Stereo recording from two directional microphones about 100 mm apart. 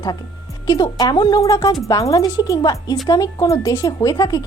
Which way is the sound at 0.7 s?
40° left (ahead or behind).